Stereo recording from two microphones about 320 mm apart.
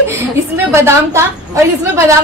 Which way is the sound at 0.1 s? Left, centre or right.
Centre.